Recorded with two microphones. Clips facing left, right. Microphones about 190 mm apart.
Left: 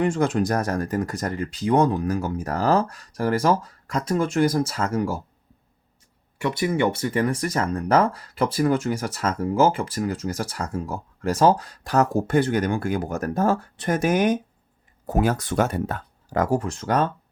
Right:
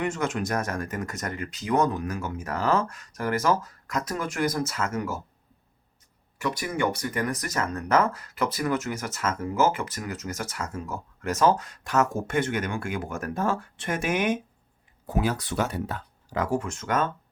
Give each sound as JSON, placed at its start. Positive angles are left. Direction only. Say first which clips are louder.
{"t": 0.0, "sound": "speech", "louder": "left 6 dB", "side_deg": 30}
{"t": 6.4, "sound": "speech", "louder": "left 5 dB", "side_deg": 25}